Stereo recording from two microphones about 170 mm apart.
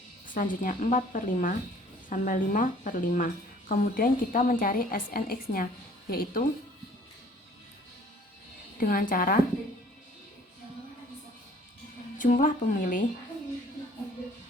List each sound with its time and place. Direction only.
0.3 s a woman's voice: 50° left (ahead or behind)
8.8 s a woman's voice: 55° left (ahead or behind)
12.1 s a woman's voice: 50° left (ahead or behind)